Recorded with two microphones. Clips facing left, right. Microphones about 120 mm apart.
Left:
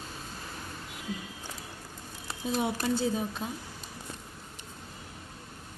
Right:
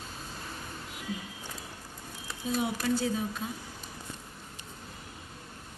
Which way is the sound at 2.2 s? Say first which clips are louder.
Left 1 dB; 25° left (ahead or behind).